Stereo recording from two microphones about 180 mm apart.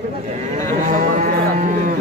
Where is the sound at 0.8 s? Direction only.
50° right (ahead or behind).